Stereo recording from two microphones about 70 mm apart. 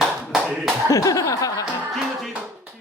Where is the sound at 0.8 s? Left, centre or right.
Left.